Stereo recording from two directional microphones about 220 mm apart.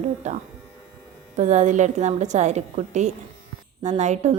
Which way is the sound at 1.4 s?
30° right (ahead or behind).